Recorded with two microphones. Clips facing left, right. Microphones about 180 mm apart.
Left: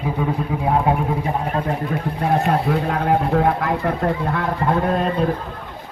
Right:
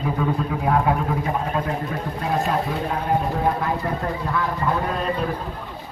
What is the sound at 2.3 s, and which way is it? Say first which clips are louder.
A man's voice: left 4 dB; 65° left (ahead or behind).